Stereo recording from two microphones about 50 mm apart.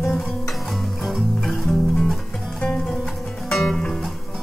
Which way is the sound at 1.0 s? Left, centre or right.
Centre.